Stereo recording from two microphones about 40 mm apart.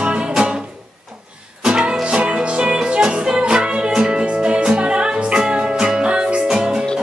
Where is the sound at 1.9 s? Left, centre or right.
Centre.